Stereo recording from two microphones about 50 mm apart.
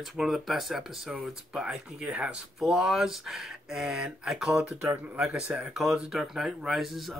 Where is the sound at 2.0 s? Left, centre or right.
Right.